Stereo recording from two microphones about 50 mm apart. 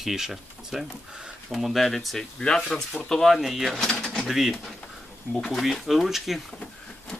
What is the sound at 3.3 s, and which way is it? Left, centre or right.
Speech, centre.